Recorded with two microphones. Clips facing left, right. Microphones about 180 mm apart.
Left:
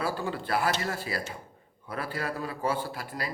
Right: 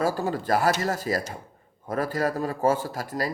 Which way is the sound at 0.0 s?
40° right (ahead or behind).